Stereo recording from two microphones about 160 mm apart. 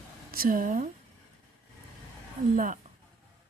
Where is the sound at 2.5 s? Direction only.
55° right (ahead or behind).